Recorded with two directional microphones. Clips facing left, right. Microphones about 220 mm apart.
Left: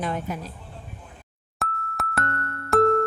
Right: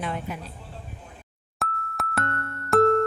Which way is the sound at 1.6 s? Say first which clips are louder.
Left 1 dB; centre (ahead or behind).